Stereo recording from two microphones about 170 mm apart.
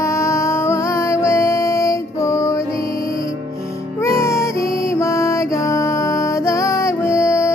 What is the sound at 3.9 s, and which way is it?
Music, 15° left (ahead or behind).